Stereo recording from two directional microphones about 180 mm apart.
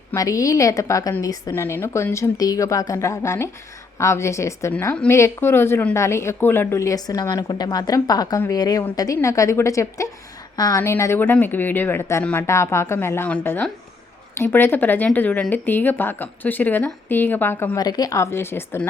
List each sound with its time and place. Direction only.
0.1 s a woman's voice: 20° left (ahead or behind)